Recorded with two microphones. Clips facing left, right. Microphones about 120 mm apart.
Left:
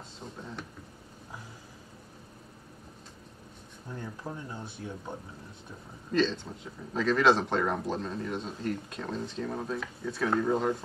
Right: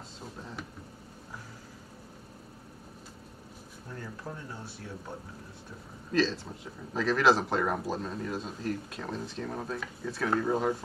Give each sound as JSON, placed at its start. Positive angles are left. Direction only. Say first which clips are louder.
{"t": 0.2, "sound": "a sound", "louder": "left 1 dB", "side_deg": -5}
{"t": 3.9, "sound": "speech", "louder": "left 2 dB", "side_deg": 20}
{"t": 6.1, "sound": "speech", "louder": "even", "side_deg": -5}